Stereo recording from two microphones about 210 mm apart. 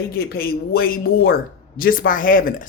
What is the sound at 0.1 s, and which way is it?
Speech, 45° left (ahead or behind).